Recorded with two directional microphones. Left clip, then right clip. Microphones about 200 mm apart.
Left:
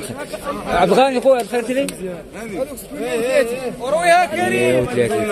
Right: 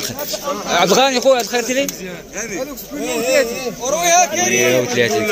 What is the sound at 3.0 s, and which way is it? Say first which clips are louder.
Speech: even; 50° right (ahead or behind).